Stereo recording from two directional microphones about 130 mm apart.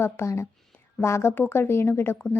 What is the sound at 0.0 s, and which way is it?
A woman's voice, 20° left (ahead or behind).